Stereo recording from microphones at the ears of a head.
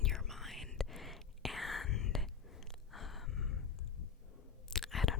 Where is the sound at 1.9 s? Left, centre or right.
Left.